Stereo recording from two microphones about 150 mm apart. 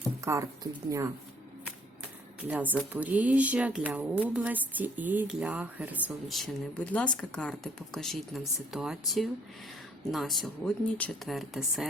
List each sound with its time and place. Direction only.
0.3 s speech: 20° right (ahead or behind)
2.4 s speech: 10° right (ahead or behind)